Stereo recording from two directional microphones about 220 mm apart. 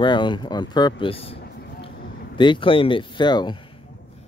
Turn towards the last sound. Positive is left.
turn(degrees=20)  # may be behind; listen again after turning